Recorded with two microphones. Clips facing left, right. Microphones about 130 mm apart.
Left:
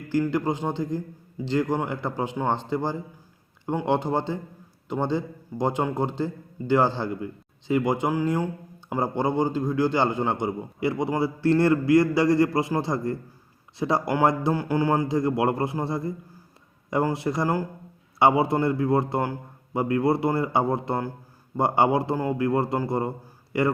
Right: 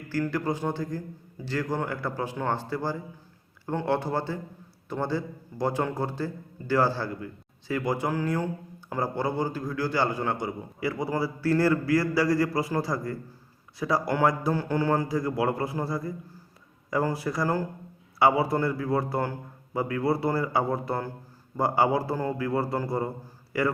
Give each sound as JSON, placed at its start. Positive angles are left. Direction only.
{"t": 0.1, "sound": "a man's voice", "side_deg": 20}